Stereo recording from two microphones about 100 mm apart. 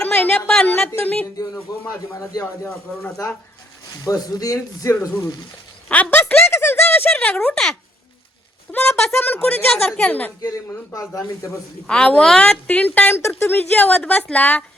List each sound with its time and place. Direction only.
0.0 s a sound: 15° left (ahead or behind)
0.9 s speech: 15° left (ahead or behind)
1.7 s a man's voice: 40° left (ahead or behind)
2.4 s a woman's voice: 15° left (ahead or behind)
4.0 s a man's voice: 35° left (ahead or behind)
5.9 s a woman's voice: 15° left (ahead or behind)
10.4 s a man's voice: 35° left (ahead or behind)
11.9 s a woman's voice: 10° left (ahead or behind)